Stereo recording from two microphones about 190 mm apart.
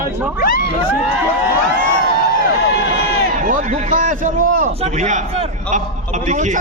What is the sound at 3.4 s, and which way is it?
A man's voice, 45° right (ahead or behind).